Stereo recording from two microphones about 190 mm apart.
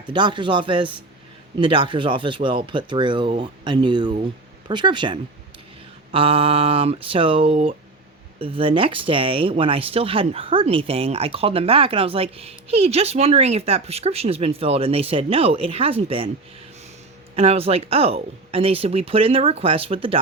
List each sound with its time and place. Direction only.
0.1 s speech: 25° right (ahead or behind)
17.3 s speech: 30° right (ahead or behind)